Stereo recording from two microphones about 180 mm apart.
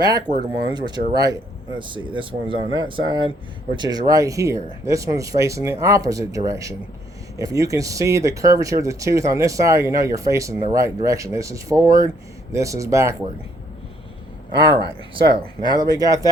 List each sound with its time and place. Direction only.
0.3 s speech: 25° right (ahead or behind)
15.1 s speech: 25° right (ahead or behind)